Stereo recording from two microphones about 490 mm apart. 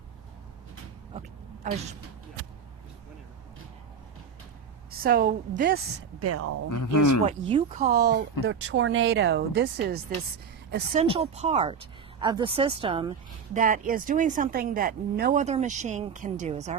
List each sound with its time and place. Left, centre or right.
1.6 s speech: centre
4.9 s speech: centre
6.7 s speech: left
7.3 s speech: centre